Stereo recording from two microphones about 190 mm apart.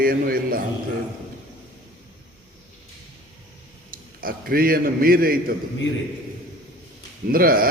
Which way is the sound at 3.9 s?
50° right (ahead or behind).